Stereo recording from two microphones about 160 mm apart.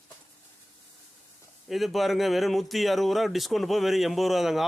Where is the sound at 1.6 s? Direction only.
Centre (ahead or behind).